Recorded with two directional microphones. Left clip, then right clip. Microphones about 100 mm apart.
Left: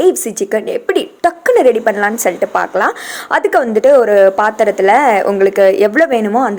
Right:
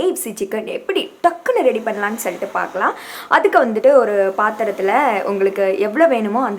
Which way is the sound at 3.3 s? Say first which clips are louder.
Left 1 dB; 60° left (ahead or behind).